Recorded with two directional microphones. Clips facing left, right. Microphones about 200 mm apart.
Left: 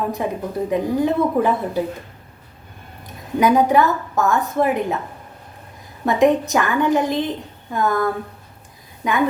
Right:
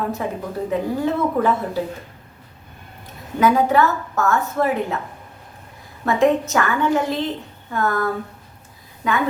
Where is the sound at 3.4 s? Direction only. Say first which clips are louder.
Left 1 dB; 15° left (ahead or behind).